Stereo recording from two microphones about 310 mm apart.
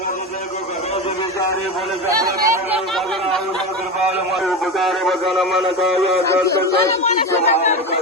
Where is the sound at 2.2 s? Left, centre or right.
Right.